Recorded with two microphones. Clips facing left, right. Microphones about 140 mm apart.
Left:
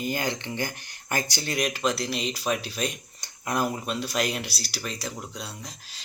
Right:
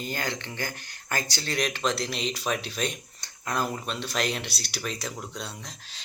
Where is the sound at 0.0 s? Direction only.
15° left (ahead or behind).